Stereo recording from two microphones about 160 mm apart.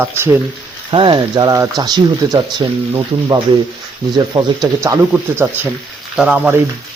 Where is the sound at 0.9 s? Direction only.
30° right (ahead or behind).